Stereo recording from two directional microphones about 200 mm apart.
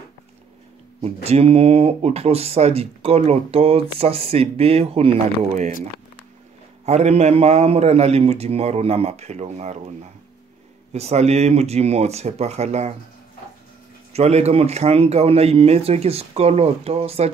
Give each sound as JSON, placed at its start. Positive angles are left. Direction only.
{"t": 1.0, "sound": "speech", "side_deg": -30}
{"t": 6.9, "sound": "speech", "side_deg": -35}
{"t": 14.1, "sound": "speech", "side_deg": -30}